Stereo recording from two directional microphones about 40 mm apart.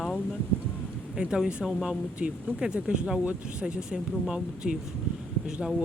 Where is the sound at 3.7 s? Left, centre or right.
Right.